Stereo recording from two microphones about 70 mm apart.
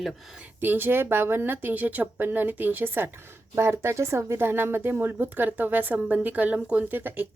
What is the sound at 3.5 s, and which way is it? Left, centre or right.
Speech, right.